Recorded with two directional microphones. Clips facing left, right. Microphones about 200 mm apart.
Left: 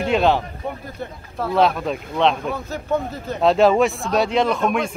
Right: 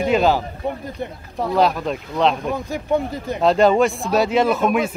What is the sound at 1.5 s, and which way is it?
Speech, centre (ahead or behind).